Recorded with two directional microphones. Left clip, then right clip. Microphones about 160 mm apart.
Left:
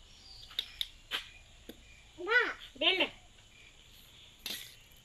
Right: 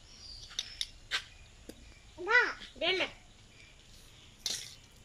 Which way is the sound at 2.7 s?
20° left (ahead or behind).